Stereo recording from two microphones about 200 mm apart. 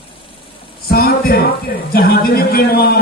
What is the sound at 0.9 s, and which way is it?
A man's voice, 50° left (ahead or behind).